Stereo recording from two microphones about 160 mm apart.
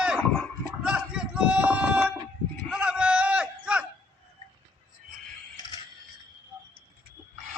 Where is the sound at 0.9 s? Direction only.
5° right (ahead or behind).